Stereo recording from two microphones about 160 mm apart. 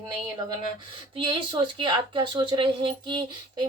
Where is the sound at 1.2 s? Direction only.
30° right (ahead or behind).